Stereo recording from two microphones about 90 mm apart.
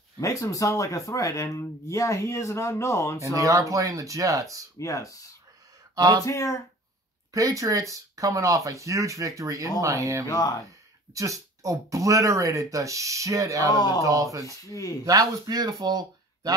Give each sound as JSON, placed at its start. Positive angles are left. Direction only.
{"t": 0.2, "sound": "speech", "side_deg": 40}
{"t": 3.3, "sound": "speech", "side_deg": -35}
{"t": 4.7, "sound": "speech", "side_deg": 35}
{"t": 5.9, "sound": "speech", "side_deg": -40}
{"t": 6.2, "sound": "speech", "side_deg": 35}
{"t": 7.3, "sound": "speech", "side_deg": -40}
{"t": 10.2, "sound": "speech", "side_deg": 45}
{"t": 11.1, "sound": "speech", "side_deg": -35}
{"t": 14.7, "sound": "speech", "side_deg": 40}
{"t": 15.0, "sound": "speech", "side_deg": -40}